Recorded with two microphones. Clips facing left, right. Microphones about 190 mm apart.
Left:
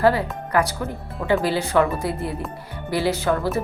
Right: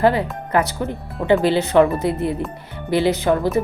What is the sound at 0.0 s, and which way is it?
Speech, 20° right (ahead or behind).